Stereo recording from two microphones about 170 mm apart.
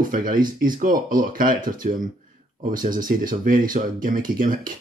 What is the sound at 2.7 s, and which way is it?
Speech, 55° right (ahead or behind).